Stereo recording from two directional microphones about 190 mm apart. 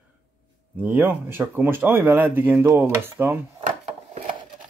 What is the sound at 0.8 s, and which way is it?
Speech, 10° right (ahead or behind).